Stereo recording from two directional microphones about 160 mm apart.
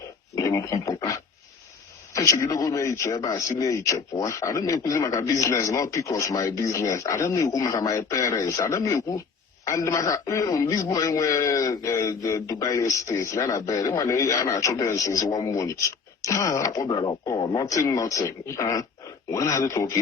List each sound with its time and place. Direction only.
0.3 s a man's voice: 20° left (ahead or behind)